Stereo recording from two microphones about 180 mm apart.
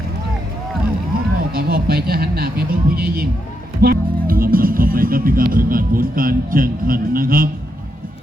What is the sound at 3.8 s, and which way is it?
Speech, 55° right (ahead or behind).